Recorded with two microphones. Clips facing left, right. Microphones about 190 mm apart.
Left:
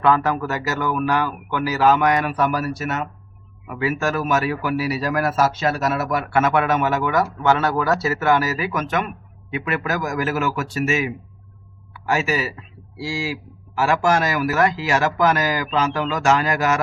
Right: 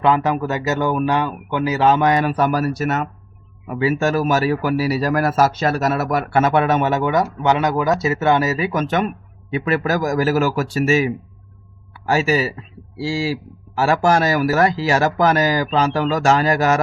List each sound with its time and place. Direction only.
0.0 s speech: 20° right (ahead or behind); by 3.1 s 40° right (ahead or behind)
3.7 s a man's voice: 30° right (ahead or behind)